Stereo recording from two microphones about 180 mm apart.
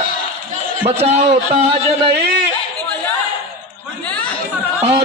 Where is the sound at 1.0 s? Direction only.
35° right (ahead or behind).